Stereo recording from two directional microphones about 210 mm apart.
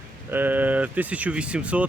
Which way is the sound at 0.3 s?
10° right (ahead or behind).